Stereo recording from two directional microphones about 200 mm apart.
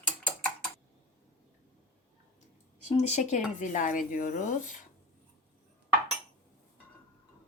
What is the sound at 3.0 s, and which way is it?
Speech, 35° left (ahead or behind).